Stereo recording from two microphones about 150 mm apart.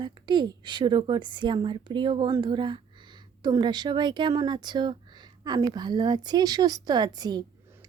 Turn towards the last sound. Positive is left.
turn(degrees=-25)  # may be behind; listen again after turning